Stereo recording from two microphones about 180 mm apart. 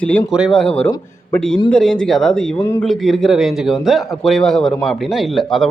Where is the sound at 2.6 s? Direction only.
15° left (ahead or behind).